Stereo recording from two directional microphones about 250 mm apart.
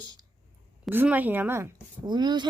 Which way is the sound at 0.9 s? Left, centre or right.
Centre.